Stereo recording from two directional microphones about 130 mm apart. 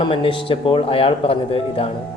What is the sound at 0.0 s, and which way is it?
A man's voice, 40° left (ahead or behind).